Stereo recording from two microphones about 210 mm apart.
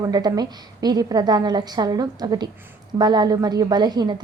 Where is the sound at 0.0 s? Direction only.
20° right (ahead or behind).